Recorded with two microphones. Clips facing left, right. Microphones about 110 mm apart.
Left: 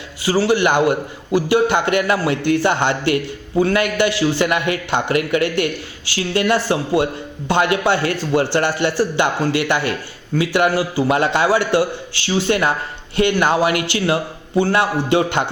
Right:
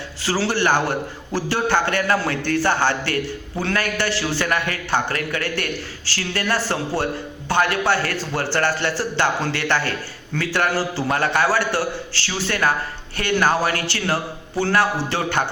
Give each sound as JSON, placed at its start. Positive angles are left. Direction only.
{"t": 0.2, "sound": "a man's voice", "side_deg": 15}